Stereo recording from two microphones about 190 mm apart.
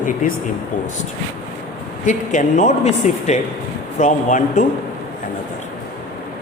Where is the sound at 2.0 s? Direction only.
40° left (ahead or behind).